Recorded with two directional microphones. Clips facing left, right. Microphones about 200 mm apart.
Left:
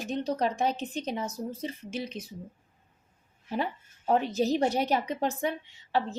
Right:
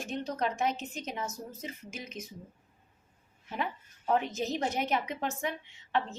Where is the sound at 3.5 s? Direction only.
35° left (ahead or behind).